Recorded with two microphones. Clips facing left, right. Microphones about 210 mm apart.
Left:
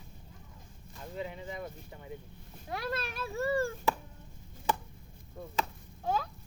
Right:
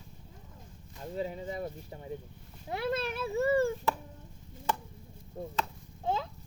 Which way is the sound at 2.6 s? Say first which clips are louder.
Right 4 dB; 20° right (ahead or behind).